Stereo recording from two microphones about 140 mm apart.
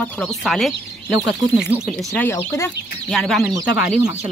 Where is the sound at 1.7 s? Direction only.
5° right (ahead or behind).